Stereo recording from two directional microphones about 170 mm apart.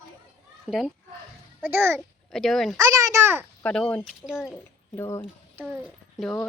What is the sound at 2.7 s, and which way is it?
Speech, 20° right (ahead or behind).